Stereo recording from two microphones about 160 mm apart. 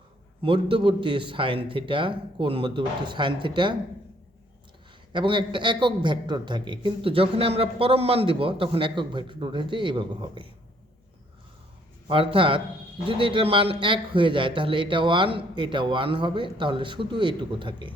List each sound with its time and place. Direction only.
0.4 s a man's voice: 35° right (ahead or behind)
5.1 s a man's voice: 30° right (ahead or behind)
12.0 s a man's voice: 35° right (ahead or behind)